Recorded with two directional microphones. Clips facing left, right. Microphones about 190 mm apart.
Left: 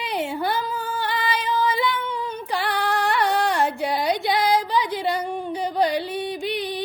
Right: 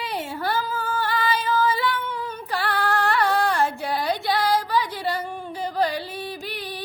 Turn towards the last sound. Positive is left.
turn(degrees=20)  # may be behind; listen again after turning